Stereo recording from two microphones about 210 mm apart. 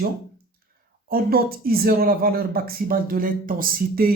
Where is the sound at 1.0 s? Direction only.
45° right (ahead or behind).